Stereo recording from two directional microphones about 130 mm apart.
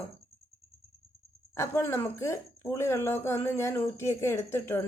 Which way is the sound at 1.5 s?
20° left (ahead or behind).